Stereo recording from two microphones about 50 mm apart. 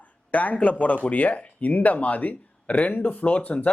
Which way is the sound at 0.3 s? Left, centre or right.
Left.